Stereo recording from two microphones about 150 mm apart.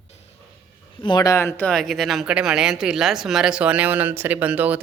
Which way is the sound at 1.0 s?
30° left (ahead or behind).